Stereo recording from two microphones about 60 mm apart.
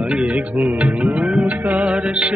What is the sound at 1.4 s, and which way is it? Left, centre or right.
Music, right.